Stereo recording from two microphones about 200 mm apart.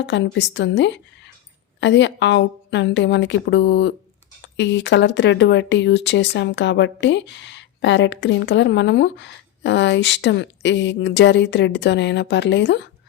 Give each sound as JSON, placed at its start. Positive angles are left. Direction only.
{"t": 0.0, "sound": "speech", "side_deg": 60}